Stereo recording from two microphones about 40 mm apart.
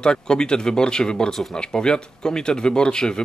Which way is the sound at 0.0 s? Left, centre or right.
Centre.